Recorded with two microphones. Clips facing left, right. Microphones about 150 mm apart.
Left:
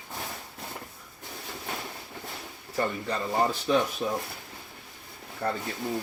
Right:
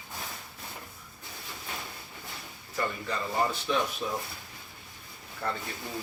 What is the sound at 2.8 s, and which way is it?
Speech, 35° left (ahead or behind).